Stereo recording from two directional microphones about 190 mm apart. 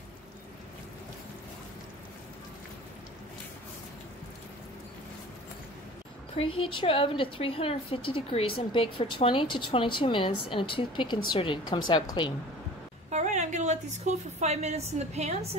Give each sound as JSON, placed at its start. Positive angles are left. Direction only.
{"t": 6.3, "sound": "a woman's voice", "side_deg": 30}
{"t": 13.1, "sound": "a woman's voice", "side_deg": -40}